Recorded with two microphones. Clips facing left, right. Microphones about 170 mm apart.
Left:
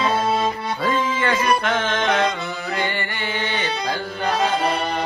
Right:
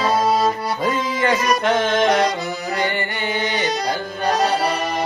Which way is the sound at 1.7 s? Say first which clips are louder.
Right 4 dB; 15° right (ahead or behind).